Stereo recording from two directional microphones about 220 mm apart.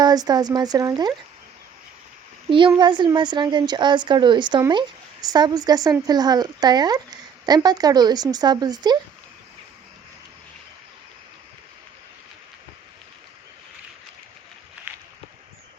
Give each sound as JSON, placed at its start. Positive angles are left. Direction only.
{"t": 0.0, "sound": "speech", "side_deg": -15}
{"t": 2.5, "sound": "a woman's voice", "side_deg": -20}